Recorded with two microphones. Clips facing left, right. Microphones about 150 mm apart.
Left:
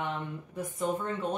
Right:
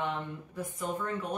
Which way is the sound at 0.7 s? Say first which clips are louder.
Left 4 dB; 25° left (ahead or behind).